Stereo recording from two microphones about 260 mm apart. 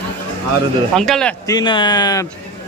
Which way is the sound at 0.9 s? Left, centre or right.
Centre.